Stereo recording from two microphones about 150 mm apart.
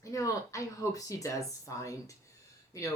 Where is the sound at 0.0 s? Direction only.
20° left (ahead or behind).